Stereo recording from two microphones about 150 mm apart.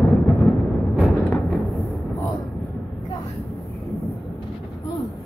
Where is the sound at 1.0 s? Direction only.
Centre (ahead or behind).